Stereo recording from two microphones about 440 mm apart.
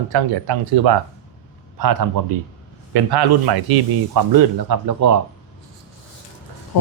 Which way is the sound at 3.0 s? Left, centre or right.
Right.